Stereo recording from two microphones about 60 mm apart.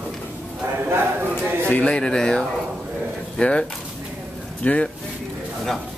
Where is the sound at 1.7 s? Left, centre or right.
Centre.